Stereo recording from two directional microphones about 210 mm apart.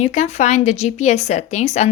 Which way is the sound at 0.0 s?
30° left (ahead or behind).